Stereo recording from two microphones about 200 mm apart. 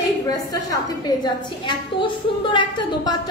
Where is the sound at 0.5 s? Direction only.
20° left (ahead or behind).